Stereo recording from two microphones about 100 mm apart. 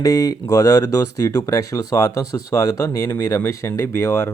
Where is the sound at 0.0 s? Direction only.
35° left (ahead or behind).